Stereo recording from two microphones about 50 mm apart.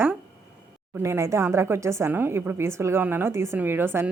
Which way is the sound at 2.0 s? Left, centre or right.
Right.